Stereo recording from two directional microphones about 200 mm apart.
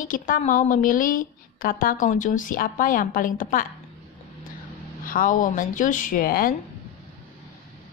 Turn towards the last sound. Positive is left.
turn(degrees=45)  # may be behind; listen again after turning